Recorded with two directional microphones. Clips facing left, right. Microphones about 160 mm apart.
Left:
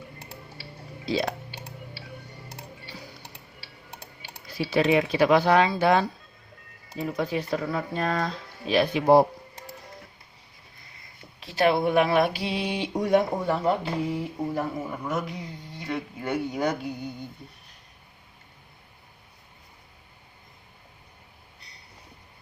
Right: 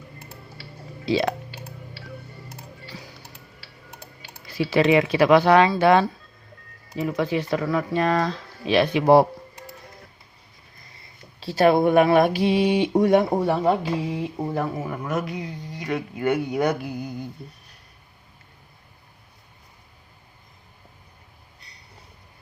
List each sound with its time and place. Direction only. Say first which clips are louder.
4.5 s speech: right 4 dB; 90° right
7.0 s speech: right 4 dB; 90° right
11.3 s speech: right 5 dB; 35° right (ahead or behind); by 15.4 s 80° right
15.8 s speech: right 6 dB; 65° right (ahead or behind)